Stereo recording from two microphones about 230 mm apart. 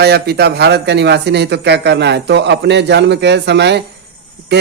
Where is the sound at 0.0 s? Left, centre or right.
Right.